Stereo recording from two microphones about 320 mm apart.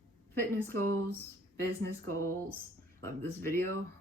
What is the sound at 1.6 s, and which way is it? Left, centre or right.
Speech, right.